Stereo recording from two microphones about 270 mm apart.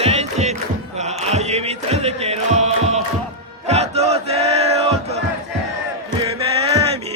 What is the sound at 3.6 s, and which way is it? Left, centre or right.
Crowd, right.